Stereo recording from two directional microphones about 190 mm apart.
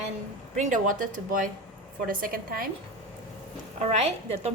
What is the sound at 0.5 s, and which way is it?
Speech, 45° right (ahead or behind).